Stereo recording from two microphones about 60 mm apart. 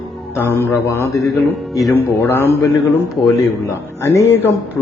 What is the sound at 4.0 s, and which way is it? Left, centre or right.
Speech, left.